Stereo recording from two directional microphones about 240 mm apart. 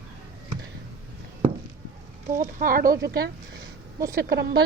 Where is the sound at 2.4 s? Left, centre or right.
Right.